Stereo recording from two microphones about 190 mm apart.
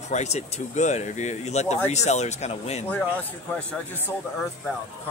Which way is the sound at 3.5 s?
10° left (ahead or behind).